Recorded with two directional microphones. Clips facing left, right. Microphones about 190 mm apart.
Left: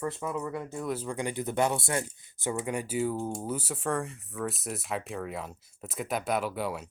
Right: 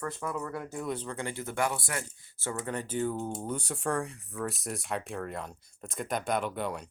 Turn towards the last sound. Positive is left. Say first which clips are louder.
# left 1 dB
turn(degrees=5)  # may be behind; listen again after turning